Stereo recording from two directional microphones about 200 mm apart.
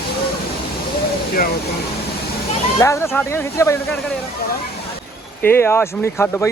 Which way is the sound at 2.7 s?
15° left (ahead or behind).